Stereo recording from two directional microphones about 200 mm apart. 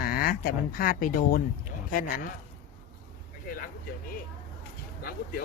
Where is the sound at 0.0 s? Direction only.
50° left (ahead or behind).